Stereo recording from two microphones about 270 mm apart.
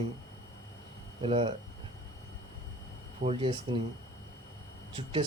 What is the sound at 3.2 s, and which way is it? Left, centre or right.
Speech, centre.